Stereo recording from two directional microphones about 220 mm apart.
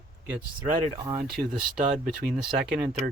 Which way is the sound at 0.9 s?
15° right (ahead or behind).